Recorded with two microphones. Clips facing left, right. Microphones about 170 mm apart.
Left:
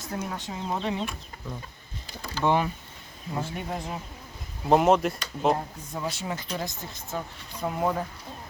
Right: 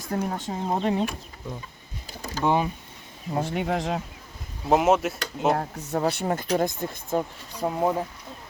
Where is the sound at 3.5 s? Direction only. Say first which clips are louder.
Right 7 dB; 75° right (ahead or behind).